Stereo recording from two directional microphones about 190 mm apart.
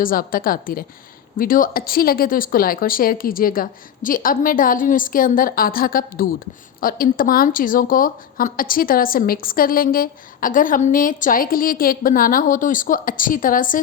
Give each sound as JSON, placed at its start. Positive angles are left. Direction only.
{"t": 0.0, "sound": "a woman's voice", "side_deg": 50}